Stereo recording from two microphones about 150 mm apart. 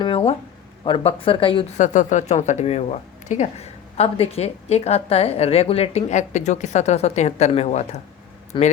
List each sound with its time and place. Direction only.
0.0 s a sound: 35° left (ahead or behind)
0.9 s speech: 35° left (ahead or behind)
1.8 s speech: 55° left (ahead or behind)
8.5 s speech: 30° left (ahead or behind)